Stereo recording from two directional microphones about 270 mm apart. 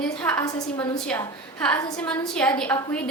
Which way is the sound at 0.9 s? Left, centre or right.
Centre.